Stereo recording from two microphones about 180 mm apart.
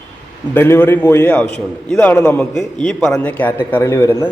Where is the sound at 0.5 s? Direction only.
10° left (ahead or behind).